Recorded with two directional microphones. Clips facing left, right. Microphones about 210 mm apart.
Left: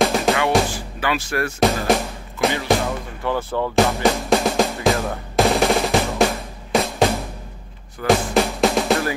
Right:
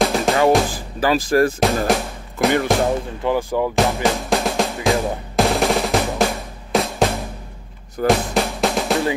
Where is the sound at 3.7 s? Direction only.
Centre (ahead or behind).